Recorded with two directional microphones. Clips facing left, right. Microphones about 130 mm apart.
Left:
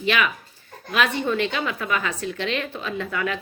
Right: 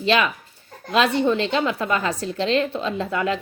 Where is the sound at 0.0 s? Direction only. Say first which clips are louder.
Right 3 dB; 30° right (ahead or behind).